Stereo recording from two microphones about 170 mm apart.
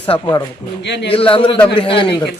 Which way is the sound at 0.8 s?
90° left.